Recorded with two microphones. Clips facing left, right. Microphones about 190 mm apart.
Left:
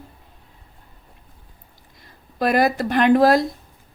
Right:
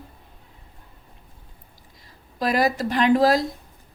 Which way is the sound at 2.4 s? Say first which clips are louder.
Left 3 dB; 55° left (ahead or behind).